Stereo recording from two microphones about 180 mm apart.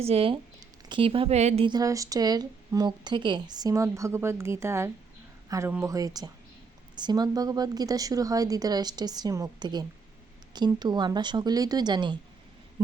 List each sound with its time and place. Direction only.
0.0 s speech: 30° right (ahead or behind)